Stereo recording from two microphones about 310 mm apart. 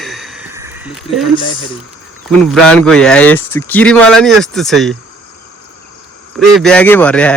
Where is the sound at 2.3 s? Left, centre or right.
Centre.